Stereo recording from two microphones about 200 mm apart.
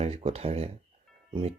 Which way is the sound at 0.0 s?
30° right (ahead or behind).